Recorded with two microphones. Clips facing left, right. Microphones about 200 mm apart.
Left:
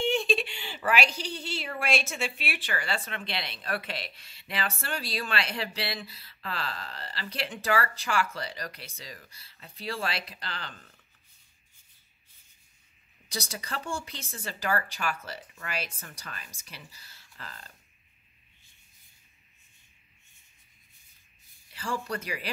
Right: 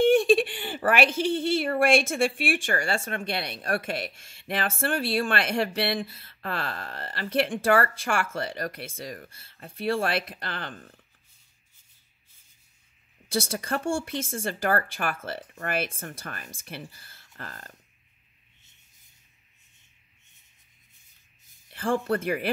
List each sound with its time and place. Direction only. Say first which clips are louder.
0.1 s speech: right 8 dB; 50° right (ahead or behind)
13.3 s speech: right 9 dB; 50° right (ahead or behind)
21.7 s speech: right 8 dB; 55° right (ahead or behind)